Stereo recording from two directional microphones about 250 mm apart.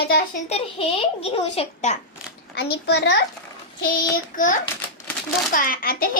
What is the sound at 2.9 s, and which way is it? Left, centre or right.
A child's voice, left.